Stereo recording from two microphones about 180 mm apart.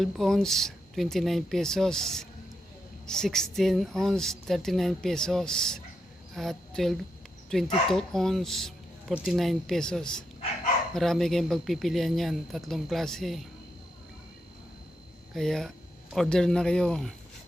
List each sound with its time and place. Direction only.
0.0 s a woman's voice: centre (ahead or behind)
15.4 s speech: centre (ahead or behind)